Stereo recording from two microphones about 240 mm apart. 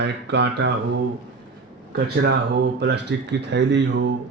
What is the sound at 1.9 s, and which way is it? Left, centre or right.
Speech, right.